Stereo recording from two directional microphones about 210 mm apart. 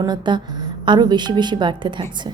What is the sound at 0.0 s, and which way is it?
A woman's voice, 20° right (ahead or behind).